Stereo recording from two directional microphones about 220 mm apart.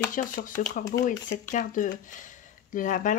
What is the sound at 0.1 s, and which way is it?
Speech, 35° left (ahead or behind).